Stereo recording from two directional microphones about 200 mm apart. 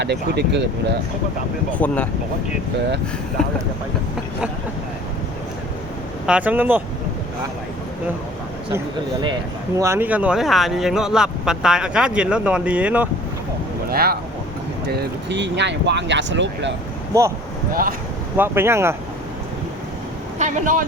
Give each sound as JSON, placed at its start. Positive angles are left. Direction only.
{"t": 0.0, "sound": "speech", "side_deg": -55}
{"t": 1.8, "sound": "speech", "side_deg": 10}
{"t": 6.2, "sound": "speech", "side_deg": -5}
{"t": 9.7, "sound": "speech", "side_deg": -15}
{"t": 13.9, "sound": "speech", "side_deg": -50}
{"t": 17.1, "sound": "speech", "side_deg": -15}
{"t": 17.7, "sound": "speech", "side_deg": -45}
{"t": 18.3, "sound": "speech", "side_deg": -10}
{"t": 20.4, "sound": "speech", "side_deg": -40}